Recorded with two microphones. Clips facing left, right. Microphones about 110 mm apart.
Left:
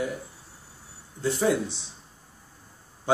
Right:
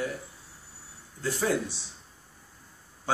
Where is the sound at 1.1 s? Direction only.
20° left (ahead or behind).